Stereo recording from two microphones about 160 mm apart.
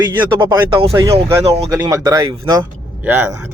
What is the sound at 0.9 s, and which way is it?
Speech, 20° right (ahead or behind).